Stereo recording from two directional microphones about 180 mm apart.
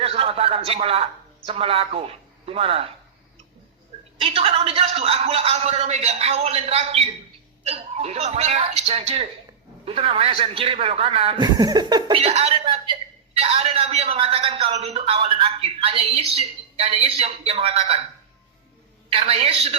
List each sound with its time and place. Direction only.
0.0 s a man's voice: 30° right (ahead or behind)
4.2 s a man's voice: 30° right (ahead or behind)
19.1 s a man's voice: 30° right (ahead or behind)